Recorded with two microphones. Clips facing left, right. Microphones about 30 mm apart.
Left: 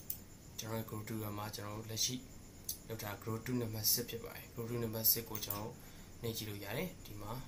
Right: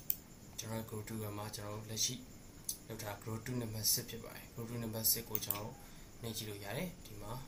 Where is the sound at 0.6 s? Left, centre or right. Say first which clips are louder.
Left 1 dB; centre.